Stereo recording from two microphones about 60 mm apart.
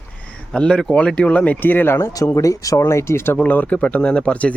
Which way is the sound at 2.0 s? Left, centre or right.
Left.